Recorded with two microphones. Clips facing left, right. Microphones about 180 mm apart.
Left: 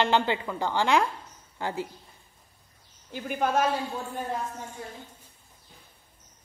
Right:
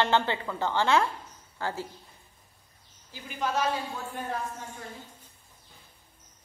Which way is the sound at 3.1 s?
55° left (ahead or behind).